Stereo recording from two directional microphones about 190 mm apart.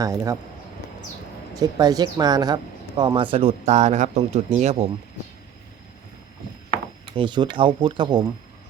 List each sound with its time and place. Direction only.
0.0 s speech: 15° right (ahead or behind)
1.5 s speech: 20° right (ahead or behind); by 4.9 s 35° right (ahead or behind)
7.2 s speech: 25° right (ahead or behind)